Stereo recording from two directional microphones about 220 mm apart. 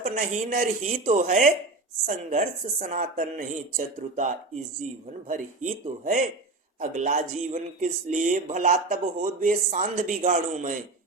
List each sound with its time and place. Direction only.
0.0 s speech: 35° right (ahead or behind)
5.6 s speech: 35° right (ahead or behind)